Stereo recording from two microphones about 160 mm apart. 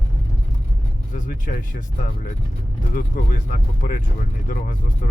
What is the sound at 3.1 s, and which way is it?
Speech, 65° left (ahead or behind).